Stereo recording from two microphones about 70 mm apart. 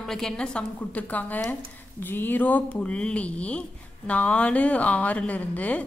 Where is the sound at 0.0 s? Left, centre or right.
Centre.